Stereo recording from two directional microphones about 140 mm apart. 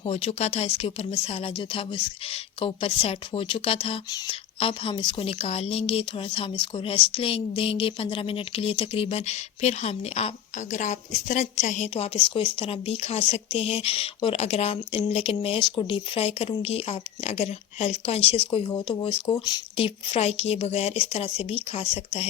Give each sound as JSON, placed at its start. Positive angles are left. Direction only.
{"t": 0.0, "sound": "a woman's voice", "side_deg": 45}